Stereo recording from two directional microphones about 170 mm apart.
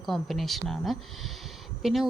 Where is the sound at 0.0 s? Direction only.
Centre (ahead or behind).